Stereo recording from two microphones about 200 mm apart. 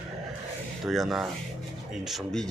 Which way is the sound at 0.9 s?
Centre (ahead or behind).